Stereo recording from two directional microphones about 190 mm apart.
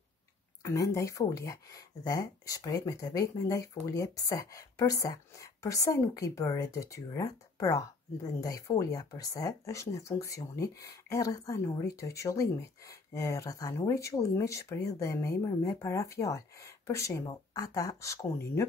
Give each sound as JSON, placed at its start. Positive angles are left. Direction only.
{"t": 0.6, "sound": "speech", "side_deg": 15}